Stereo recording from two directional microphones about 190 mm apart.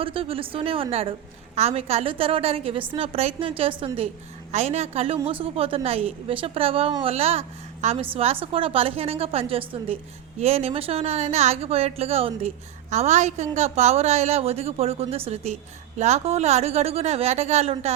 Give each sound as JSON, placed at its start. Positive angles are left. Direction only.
{"t": 0.0, "sound": "a woman's voice", "side_deg": -30}